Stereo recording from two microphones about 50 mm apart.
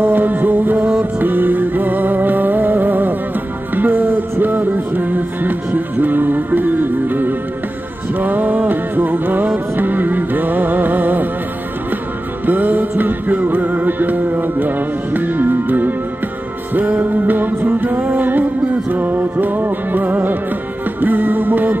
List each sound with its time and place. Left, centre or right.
0.0 s music: right
12.4 s music: right
17.0 s music: right